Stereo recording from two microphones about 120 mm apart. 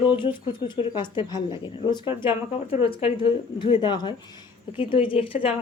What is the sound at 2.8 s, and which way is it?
Speech, 50° left (ahead or behind).